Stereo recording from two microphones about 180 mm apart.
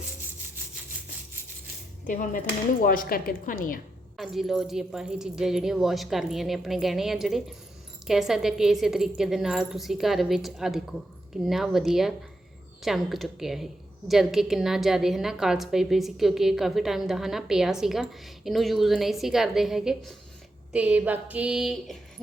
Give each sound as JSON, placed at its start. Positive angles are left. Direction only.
{"t": 2.0, "sound": "a woman's voice", "side_deg": 45}
{"t": 4.2, "sound": "a woman's voice", "side_deg": 0}
{"t": 20.7, "sound": "a sound", "side_deg": -10}